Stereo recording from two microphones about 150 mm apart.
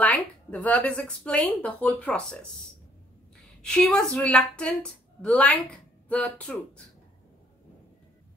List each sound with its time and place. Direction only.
0.0 s speech: 10° left (ahead or behind)
3.6 s speech: 5° left (ahead or behind)